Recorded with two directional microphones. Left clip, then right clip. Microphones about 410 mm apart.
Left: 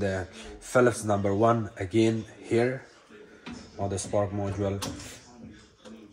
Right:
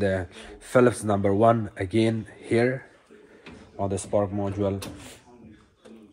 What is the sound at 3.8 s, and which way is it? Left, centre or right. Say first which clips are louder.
Speech: right 3 dB; centre.